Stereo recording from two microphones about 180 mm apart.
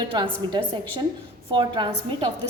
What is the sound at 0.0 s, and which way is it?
Speech, 25° right (ahead or behind).